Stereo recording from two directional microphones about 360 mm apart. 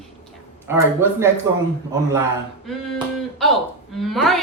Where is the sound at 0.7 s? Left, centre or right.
Centre.